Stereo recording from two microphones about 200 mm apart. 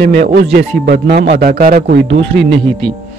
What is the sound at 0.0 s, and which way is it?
A man's voice, 50° right (ahead or behind).